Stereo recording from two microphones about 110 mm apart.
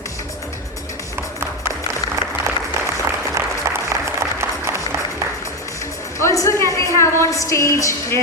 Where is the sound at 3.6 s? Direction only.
25° right (ahead or behind).